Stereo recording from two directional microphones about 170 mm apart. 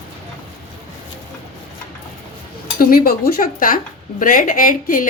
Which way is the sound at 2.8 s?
60° left (ahead or behind).